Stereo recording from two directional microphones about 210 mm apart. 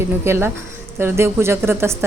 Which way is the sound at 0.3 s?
10° right (ahead or behind).